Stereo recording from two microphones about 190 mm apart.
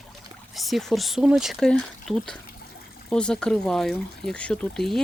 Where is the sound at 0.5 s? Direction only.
Centre (ahead or behind).